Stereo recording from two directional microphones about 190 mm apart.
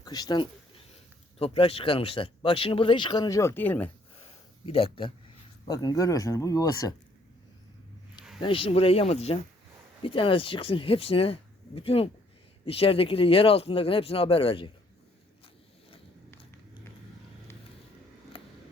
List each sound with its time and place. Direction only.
0.0 s speech: 20° left (ahead or behind)
4.7 s speech: 30° left (ahead or behind)
8.4 s speech: 30° left (ahead or behind)